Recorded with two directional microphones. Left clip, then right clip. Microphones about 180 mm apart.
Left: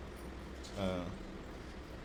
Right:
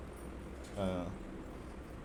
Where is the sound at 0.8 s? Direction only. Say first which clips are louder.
Right 1 dB; 10° right (ahead or behind).